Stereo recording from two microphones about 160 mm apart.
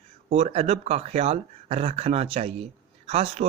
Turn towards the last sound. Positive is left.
turn(degrees=-40)  # may be behind; listen again after turning